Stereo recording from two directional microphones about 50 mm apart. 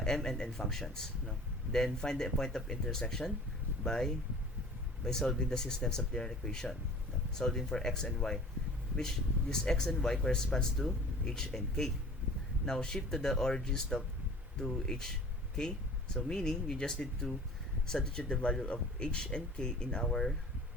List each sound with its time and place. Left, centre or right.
0.0 s speech: centre
16.1 s speech: centre